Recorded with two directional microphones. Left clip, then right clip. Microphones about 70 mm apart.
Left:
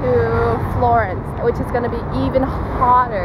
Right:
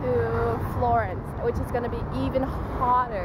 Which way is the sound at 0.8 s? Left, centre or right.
Centre.